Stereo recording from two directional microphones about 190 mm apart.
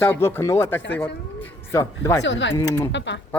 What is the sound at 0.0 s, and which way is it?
Speech, 10° left (ahead or behind).